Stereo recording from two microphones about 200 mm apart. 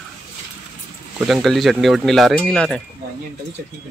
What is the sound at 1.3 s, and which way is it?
Speech, centre (ahead or behind).